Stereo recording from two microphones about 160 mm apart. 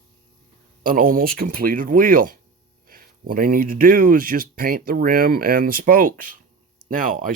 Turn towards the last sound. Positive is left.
turn(degrees=-60)  # may be behind; listen again after turning